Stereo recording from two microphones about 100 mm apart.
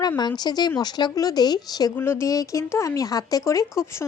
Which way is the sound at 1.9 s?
25° left (ahead or behind).